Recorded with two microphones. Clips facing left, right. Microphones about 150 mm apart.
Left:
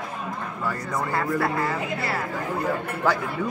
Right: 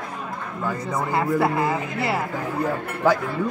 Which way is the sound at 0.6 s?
20° right (ahead or behind).